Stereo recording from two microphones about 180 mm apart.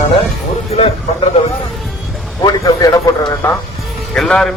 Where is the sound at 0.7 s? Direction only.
35° left (ahead or behind).